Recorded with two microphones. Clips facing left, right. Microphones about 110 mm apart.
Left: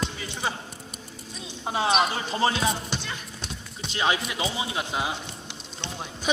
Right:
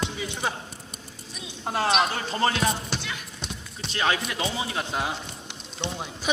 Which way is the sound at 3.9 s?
20° left (ahead or behind).